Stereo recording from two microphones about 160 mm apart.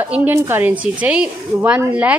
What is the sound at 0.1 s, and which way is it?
A woman's voice, 10° right (ahead or behind).